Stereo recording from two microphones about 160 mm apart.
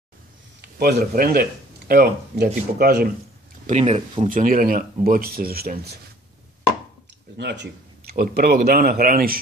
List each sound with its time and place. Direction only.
0.6 s speech: 90° right
3.6 s speech: 40° right (ahead or behind)
4.3 s speech: 60° right (ahead or behind)
7.3 s speech: 90° right; by 9.4 s 65° right (ahead or behind)